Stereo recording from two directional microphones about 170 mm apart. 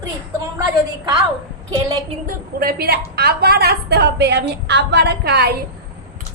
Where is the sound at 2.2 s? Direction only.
60° right (ahead or behind).